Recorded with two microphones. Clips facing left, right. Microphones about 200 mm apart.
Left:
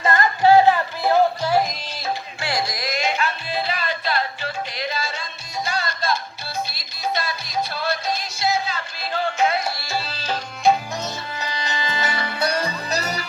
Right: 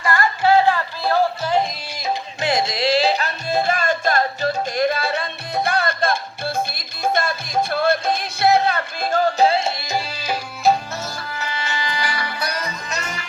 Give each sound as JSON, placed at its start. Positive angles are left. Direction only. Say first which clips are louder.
{"t": 0.0, "sound": "music", "louder": "left 1 dB", "side_deg": 20}
{"t": 2.0, "sound": "music", "louder": "right 4 dB", "side_deg": -20}
{"t": 11.0, "sound": "music", "louder": "even", "side_deg": 20}